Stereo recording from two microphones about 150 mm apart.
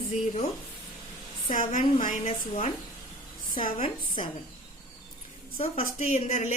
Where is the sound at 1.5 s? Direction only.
60° left (ahead or behind).